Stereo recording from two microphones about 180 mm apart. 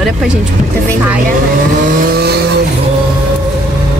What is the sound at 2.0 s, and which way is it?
Vehicle, 60° right (ahead or behind).